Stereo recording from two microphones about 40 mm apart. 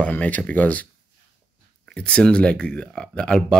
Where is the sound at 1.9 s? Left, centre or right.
Left.